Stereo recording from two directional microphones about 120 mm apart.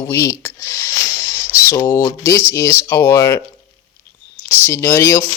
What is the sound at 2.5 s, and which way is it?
Speech, 25° left (ahead or behind).